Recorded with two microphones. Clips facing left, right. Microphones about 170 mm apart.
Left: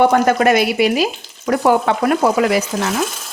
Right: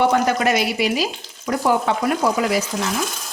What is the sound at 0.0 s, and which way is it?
Frying, 50° left (ahead or behind).